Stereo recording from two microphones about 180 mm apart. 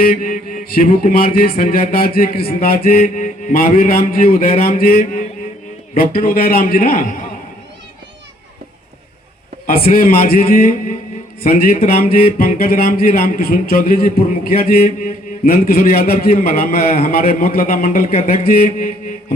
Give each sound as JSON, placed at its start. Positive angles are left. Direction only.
{"t": 0.0, "sound": "music", "side_deg": 55}
{"t": 9.6, "sound": "music", "side_deg": 55}
{"t": 11.4, "sound": "speech", "side_deg": 45}
{"t": 12.1, "sound": "music", "side_deg": 55}